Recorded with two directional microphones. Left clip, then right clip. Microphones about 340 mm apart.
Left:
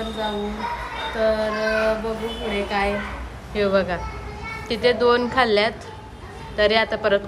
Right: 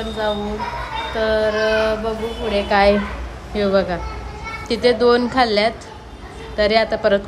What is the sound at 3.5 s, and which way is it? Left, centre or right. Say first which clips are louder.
A woman's voice: right 2 dB; centre.